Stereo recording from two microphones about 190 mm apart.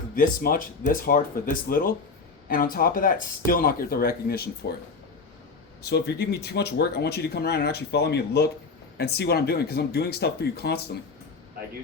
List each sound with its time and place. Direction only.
0.2 s speech: 45° left (ahead or behind)
5.8 s speech: 60° left (ahead or behind)